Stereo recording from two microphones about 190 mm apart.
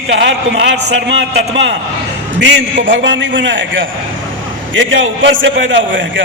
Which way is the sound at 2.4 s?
70° right (ahead or behind).